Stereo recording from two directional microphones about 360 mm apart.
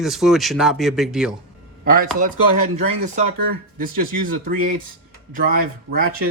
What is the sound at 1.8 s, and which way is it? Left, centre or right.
Speech, right.